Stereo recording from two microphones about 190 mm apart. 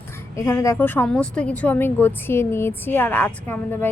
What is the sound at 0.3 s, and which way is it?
A woman's voice, 15° left (ahead or behind).